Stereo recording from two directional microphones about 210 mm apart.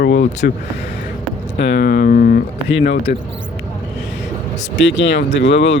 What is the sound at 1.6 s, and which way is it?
Speech, 50° left (ahead or behind).